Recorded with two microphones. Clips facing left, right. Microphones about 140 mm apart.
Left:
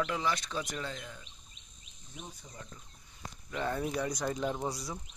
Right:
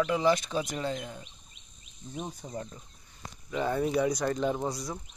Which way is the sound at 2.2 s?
50° right (ahead or behind).